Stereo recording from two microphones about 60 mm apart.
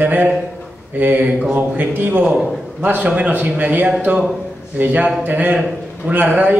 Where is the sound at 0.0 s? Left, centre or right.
Right.